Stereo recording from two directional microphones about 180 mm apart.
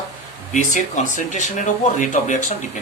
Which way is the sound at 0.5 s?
45° left (ahead or behind).